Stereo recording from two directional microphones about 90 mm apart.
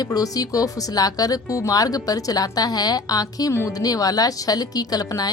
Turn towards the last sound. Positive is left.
turn(degrees=45)  # may be behind; listen again after turning